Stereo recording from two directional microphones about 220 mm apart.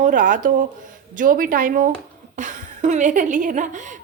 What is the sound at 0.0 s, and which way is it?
A woman's voice, 35° right (ahead or behind).